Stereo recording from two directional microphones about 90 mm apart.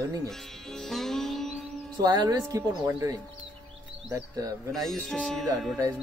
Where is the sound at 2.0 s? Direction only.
50° right (ahead or behind).